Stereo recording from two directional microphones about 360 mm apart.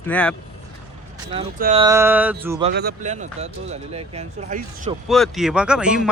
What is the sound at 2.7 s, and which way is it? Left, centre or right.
Speech, right.